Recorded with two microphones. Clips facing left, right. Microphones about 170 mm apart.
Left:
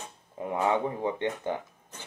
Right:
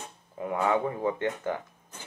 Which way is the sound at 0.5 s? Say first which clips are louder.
Even; 20° left (ahead or behind).